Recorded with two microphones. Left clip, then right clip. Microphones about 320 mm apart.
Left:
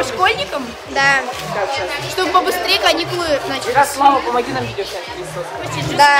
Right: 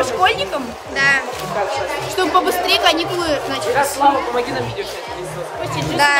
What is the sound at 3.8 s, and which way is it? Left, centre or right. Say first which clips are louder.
Speech: left 5 dB; centre.